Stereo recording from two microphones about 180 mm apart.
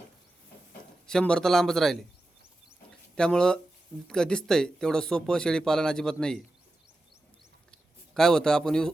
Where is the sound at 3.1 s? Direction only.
5° left (ahead or behind).